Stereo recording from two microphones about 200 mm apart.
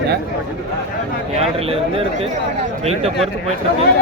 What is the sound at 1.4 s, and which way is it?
Speech, 30° right (ahead or behind).